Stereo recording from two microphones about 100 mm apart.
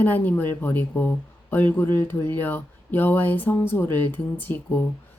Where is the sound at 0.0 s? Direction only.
20° left (ahead or behind).